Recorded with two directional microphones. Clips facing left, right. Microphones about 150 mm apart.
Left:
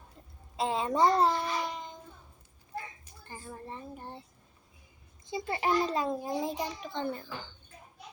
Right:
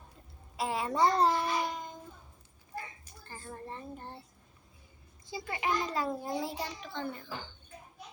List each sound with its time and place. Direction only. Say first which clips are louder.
0.5 s a child's voice: left 3 dB; 20° left (ahead or behind)
1.2 s a sound: even; centre (ahead or behind)
3.4 s a child's voice: even; centre (ahead or behind)
5.2 s a child's voice: left 5 dB; 20° left (ahead or behind)
5.5 s a child's voice: left 4 dB; 35° left (ahead or behind)
5.9 s a child's voice: left 2 dB; 20° left (ahead or behind)